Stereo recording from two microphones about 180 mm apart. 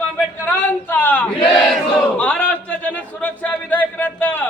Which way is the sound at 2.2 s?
5° left (ahead or behind).